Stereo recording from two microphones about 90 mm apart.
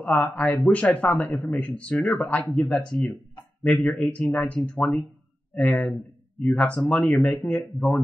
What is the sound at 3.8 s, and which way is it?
Speech, 15° left (ahead or behind).